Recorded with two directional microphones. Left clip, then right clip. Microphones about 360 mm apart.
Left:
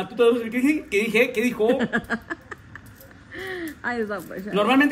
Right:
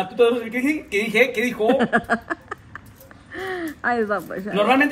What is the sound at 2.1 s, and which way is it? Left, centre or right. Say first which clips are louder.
Speech: right 5 dB; right.